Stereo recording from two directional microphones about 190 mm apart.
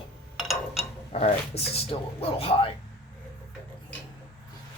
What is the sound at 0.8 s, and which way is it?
Speech, 35° left (ahead or behind).